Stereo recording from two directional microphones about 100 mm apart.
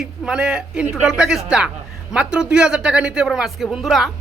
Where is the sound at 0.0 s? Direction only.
5° right (ahead or behind).